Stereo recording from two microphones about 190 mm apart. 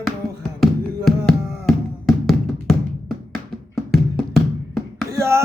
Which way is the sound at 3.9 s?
Centre (ahead or behind).